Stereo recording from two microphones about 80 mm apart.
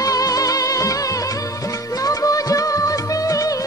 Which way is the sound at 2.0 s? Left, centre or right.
Left.